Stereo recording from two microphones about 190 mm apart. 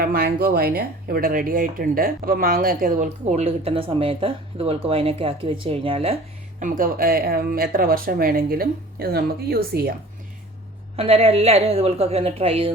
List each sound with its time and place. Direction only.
0.0 s speech: 55° right (ahead or behind); by 6.1 s 30° right (ahead or behind)
6.6 s speech: 45° right (ahead or behind)
10.9 s a woman's voice: 30° right (ahead or behind)